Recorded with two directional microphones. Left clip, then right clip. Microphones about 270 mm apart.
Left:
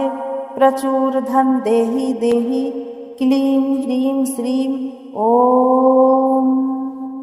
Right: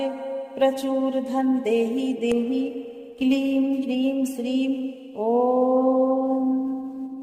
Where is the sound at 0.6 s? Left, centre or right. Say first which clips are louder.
Left 8 dB; left.